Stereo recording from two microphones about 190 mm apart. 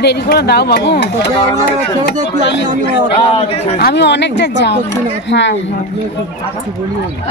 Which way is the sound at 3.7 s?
60° left (ahead or behind).